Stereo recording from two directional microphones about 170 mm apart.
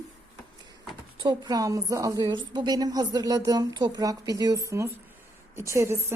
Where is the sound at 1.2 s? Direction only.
25° right (ahead or behind).